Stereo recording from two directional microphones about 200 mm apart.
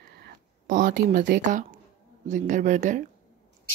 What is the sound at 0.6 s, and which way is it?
Speech, 45° right (ahead or behind).